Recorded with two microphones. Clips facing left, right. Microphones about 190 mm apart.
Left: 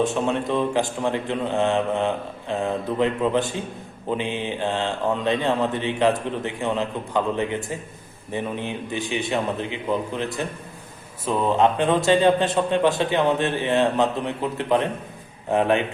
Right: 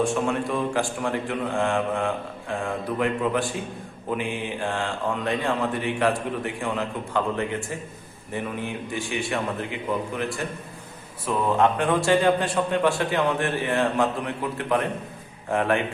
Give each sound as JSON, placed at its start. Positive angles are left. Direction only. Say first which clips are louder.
{"t": 0.0, "sound": "speech", "louder": "left 1 dB", "side_deg": 20}